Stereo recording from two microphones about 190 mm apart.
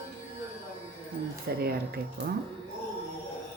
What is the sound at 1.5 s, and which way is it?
Speech, 55° right (ahead or behind).